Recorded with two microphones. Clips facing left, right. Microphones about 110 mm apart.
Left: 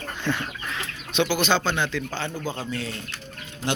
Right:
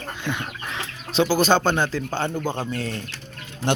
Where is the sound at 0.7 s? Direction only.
35° right (ahead or behind).